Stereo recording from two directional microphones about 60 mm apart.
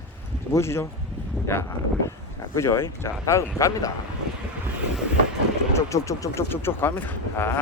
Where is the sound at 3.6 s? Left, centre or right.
Left.